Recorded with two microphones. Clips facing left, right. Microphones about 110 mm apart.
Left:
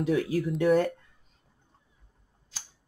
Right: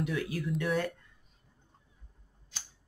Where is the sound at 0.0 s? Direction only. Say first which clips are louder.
Left 7 dB; 40° left (ahead or behind).